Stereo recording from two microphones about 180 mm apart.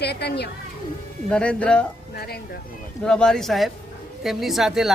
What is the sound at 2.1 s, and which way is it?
Speech, 60° left (ahead or behind).